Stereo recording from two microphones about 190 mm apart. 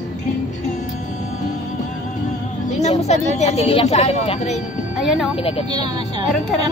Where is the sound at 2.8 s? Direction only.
35° left (ahead or behind).